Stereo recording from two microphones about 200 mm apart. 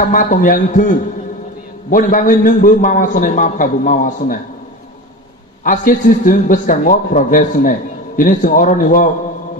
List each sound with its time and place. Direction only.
0.1 s a man's voice: 40° left (ahead or behind)
5.6 s a man's voice: 45° left (ahead or behind)